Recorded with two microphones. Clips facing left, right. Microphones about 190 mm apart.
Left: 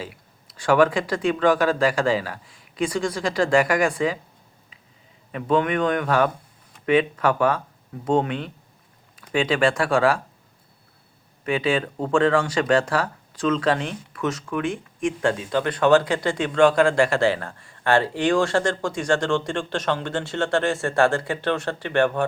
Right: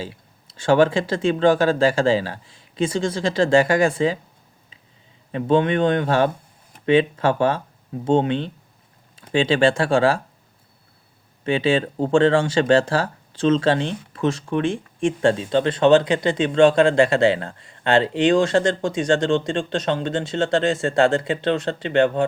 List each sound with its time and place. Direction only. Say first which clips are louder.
0.0 s speech: right 3 dB; 25° right (ahead or behind)
5.3 s speech: right 3 dB; 25° right (ahead or behind)
11.4 s speech: right 3 dB; 25° right (ahead or behind)